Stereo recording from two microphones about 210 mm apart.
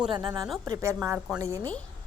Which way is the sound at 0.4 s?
Centre (ahead or behind).